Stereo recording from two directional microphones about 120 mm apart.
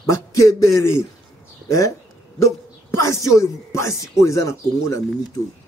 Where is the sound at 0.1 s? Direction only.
25° left (ahead or behind).